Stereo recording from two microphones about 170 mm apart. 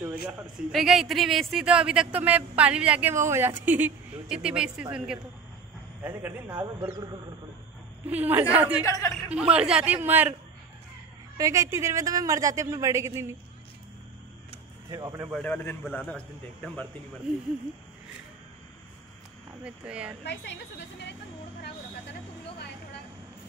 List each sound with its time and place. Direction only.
0.0 s speech: 10° right (ahead or behind)
0.7 s speech: centre (ahead or behind)
6.6 s speech: 20° right (ahead or behind)
8.1 s speech: 10° right (ahead or behind)
8.8 s a man's voice: 20° left (ahead or behind)
9.5 s speech: 5° right (ahead or behind)
11.3 s speech: 20° right (ahead or behind)
14.9 s speech: 20° right (ahead or behind)
15.3 s a man's voice: 10° left (ahead or behind)
19.6 s speech: 5° right (ahead or behind)